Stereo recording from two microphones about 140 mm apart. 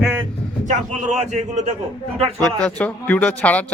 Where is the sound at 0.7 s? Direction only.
60° right (ahead or behind).